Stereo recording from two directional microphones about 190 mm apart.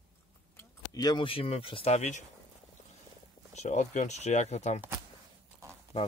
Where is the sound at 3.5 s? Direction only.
35° left (ahead or behind).